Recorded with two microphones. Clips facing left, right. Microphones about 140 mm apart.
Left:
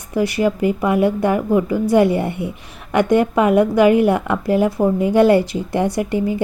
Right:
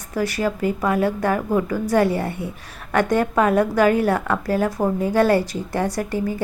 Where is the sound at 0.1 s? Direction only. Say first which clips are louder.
Left 5 dB; 15° left (ahead or behind).